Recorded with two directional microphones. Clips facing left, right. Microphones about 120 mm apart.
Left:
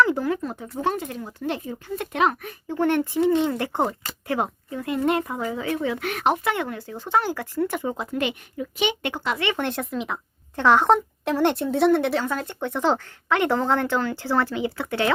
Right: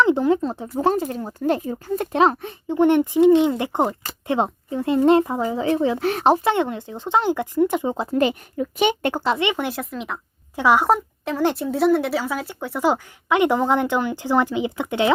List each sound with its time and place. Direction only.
0.0 s speech: 20° right (ahead or behind)
7.9 s speech: 35° right (ahead or behind)
9.2 s speech: 25° right (ahead or behind)
9.5 s speech: 5° right (ahead or behind)